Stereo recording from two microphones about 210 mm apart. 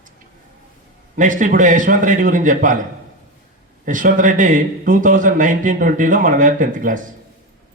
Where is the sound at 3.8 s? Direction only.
40° right (ahead or behind).